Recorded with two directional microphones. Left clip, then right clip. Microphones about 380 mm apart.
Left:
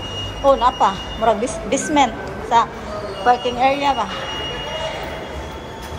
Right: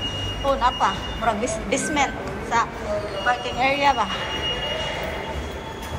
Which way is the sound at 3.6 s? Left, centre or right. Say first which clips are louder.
Left 2 dB; centre.